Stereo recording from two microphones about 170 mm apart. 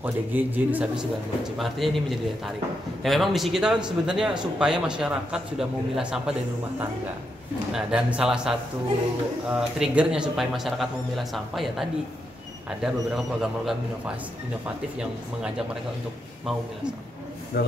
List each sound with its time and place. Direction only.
0.0 s a man's voice: 10° right (ahead or behind)
7.7 s a man's voice: 5° right (ahead or behind)
17.5 s speech: 75° left (ahead or behind)